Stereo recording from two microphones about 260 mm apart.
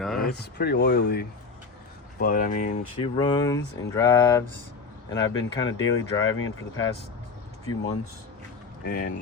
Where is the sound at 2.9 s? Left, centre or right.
Centre.